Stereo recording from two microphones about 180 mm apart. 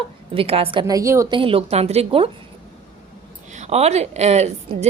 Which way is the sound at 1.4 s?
30° right (ahead or behind).